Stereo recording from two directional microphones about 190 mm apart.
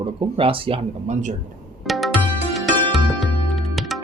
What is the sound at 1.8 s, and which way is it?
Music, centre (ahead or behind).